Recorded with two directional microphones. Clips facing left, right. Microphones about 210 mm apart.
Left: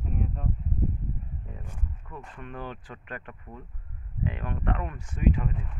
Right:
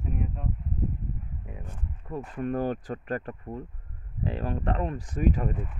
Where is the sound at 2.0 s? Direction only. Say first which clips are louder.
Right 13 dB; 40° right (ahead or behind).